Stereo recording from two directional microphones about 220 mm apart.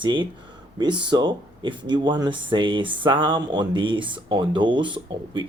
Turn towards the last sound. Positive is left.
turn(degrees=-20)  # may be behind; listen again after turning